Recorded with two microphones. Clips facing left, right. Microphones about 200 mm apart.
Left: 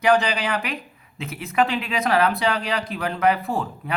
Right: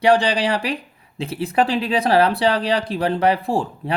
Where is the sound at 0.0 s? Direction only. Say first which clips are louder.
Right 3 dB; 30° right (ahead or behind).